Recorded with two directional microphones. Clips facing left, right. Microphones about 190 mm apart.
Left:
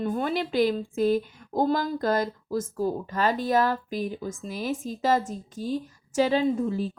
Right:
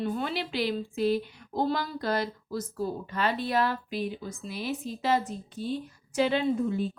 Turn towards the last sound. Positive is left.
turn(degrees=40)  # may be behind; listen again after turning